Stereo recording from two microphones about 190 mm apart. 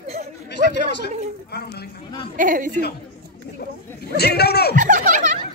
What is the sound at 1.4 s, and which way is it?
Speech, 60° left (ahead or behind).